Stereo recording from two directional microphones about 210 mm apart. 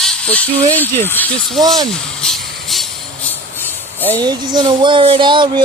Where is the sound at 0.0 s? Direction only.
5° left (ahead or behind).